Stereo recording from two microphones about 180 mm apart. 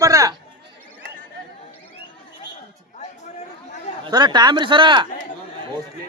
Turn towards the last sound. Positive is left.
turn(degrees=-25)  # may be behind; listen again after turning